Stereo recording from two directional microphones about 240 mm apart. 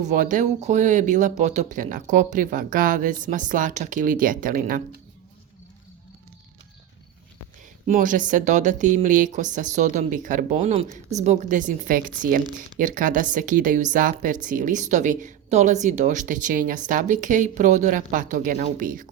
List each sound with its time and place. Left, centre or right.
0.0 s speech: right
7.9 s speech: right